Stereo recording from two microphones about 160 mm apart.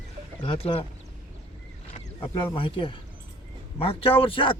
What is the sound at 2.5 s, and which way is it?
Speech, 35° left (ahead or behind).